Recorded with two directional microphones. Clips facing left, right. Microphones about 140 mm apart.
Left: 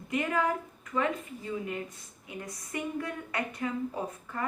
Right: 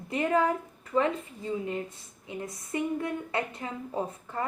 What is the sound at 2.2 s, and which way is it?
A woman's voice, 25° right (ahead or behind).